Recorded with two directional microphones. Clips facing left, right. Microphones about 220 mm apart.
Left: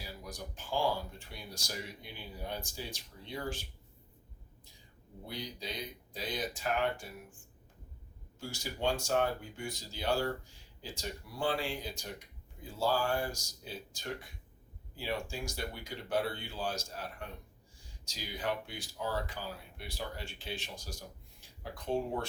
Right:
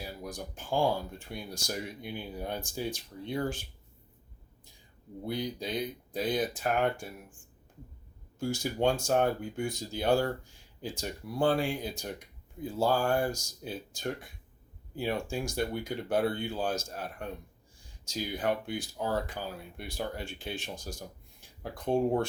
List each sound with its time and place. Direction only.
0.3 s speech: 50° right (ahead or behind)
5.2 s speech: 50° right (ahead or behind)
8.4 s speech: 50° right (ahead or behind)